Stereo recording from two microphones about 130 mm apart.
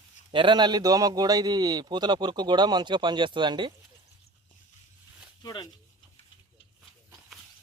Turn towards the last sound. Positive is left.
turn(degrees=35)  # may be behind; listen again after turning